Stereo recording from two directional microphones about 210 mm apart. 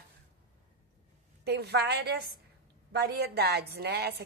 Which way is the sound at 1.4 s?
50° right (ahead or behind).